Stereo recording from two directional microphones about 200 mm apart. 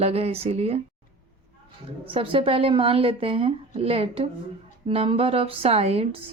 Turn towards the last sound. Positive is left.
turn(degrees=-30)  # may be behind; listen again after turning